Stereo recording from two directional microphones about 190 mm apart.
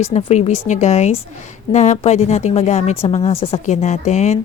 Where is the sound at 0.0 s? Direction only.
30° left (ahead or behind).